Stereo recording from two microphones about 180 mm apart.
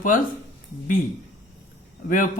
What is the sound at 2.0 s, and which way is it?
Speech, 50° left (ahead or behind).